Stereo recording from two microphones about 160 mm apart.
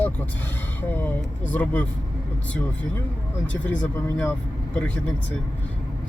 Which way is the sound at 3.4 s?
5° left (ahead or behind).